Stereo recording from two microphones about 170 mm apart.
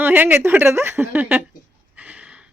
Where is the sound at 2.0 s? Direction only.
10° right (ahead or behind).